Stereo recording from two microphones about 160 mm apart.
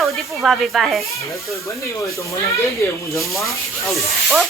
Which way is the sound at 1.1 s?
20° left (ahead or behind).